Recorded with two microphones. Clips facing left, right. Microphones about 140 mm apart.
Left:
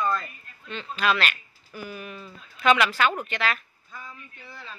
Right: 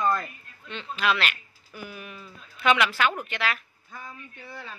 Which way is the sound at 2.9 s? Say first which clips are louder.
Left 1 dB; 20° left (ahead or behind).